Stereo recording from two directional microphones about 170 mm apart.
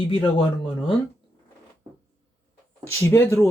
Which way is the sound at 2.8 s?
15° left (ahead or behind).